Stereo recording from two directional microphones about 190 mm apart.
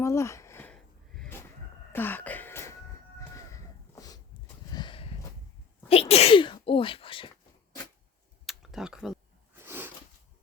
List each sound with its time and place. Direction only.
0.0 s sniff: 15° left (ahead or behind)
1.9 s music: 10° left (ahead or behind)
3.2 s a sound: 15° left (ahead or behind)
5.9 s sneeze: 30° left (ahead or behind)
8.4 s computer keyboard: centre (ahead or behind)
9.6 s a sound: 10° right (ahead or behind)